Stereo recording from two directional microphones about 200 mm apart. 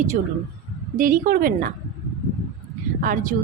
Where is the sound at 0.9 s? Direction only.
45° right (ahead or behind).